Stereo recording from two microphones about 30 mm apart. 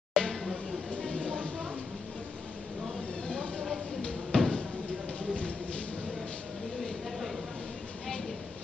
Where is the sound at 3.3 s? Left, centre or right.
Left.